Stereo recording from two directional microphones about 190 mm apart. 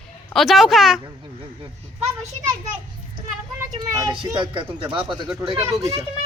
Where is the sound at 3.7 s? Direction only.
25° right (ahead or behind).